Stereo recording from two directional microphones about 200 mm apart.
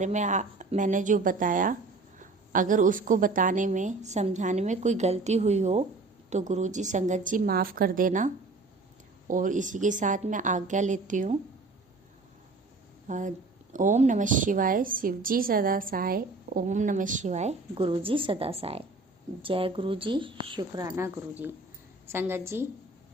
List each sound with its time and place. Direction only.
0.0 s a woman's voice: 35° right (ahead or behind)
13.1 s a woman's voice: 40° right (ahead or behind); by 22.6 s 10° right (ahead or behind)